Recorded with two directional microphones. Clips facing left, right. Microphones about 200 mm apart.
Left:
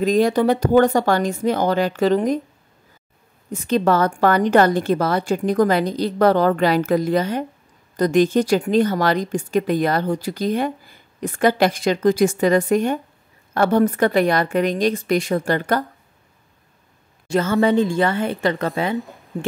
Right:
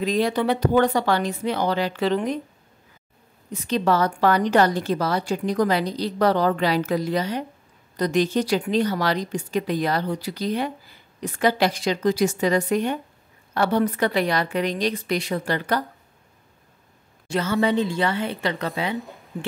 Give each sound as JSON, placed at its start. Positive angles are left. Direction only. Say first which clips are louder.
{"t": 0.0, "sound": "speech", "louder": "left 5 dB", "side_deg": 45}
{"t": 3.5, "sound": "speech", "louder": "left 4 dB", "side_deg": 50}
{"t": 17.3, "sound": "speech", "louder": "left 4 dB", "side_deg": 50}